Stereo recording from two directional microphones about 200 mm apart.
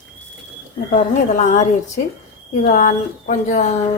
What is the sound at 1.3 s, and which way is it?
Speech, 35° left (ahead or behind).